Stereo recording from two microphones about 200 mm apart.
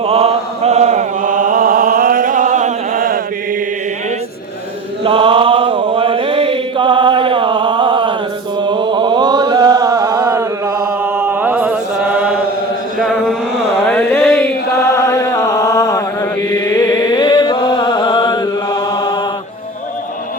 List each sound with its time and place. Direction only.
0.0 s mantra: 30° right (ahead or behind)
5.0 s chant: 25° right (ahead or behind); by 12.4 s 5° right (ahead or behind)
13.0 s a sound: centre (ahead or behind)
13.7 s mantra: 5° left (ahead or behind)
16.5 s chant: 15° left (ahead or behind)